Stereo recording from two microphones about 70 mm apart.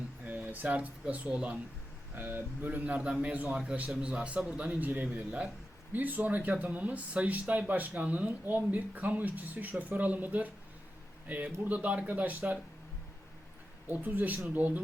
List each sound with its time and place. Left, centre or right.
0.3 s speech: right
2.1 s a man's voice: right
13.8 s speech: right